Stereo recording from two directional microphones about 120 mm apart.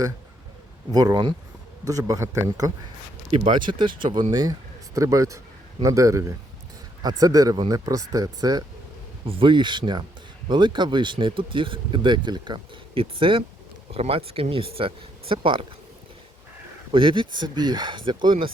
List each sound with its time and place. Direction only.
0.9 s a man's voice: 35° right (ahead or behind)
3.5 s a man's voice: 40° right (ahead or behind)
9.2 s speech: 45° right (ahead or behind)
16.9 s speech: 45° right (ahead or behind)